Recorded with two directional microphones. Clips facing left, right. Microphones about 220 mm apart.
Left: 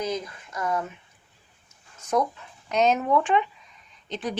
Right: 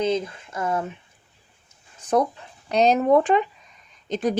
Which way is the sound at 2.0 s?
30° right (ahead or behind).